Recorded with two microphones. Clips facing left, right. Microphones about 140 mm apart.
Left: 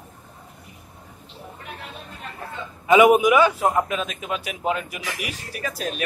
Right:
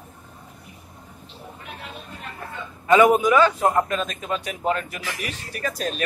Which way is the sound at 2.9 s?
15° left (ahead or behind).